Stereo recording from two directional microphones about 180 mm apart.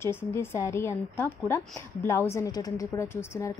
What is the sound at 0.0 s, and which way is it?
Speech, 15° left (ahead or behind).